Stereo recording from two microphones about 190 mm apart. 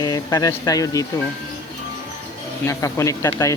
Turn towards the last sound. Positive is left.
turn(degrees=15)  # may be behind; listen again after turning